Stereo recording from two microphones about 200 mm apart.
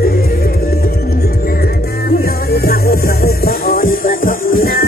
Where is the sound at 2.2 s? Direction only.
50° left (ahead or behind).